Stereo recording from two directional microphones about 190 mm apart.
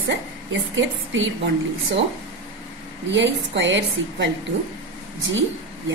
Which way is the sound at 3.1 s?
70° right (ahead or behind).